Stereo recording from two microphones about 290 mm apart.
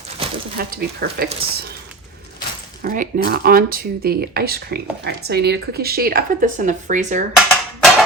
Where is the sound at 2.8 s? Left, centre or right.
Right.